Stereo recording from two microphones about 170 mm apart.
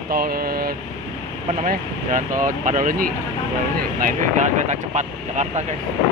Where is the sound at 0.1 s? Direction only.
60° right (ahead or behind).